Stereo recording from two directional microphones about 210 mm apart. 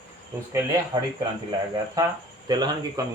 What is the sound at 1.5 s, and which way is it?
Speech, 20° right (ahead or behind).